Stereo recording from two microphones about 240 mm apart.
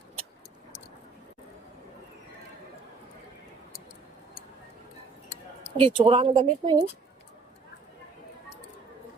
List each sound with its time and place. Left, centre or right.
5.7 s speech: right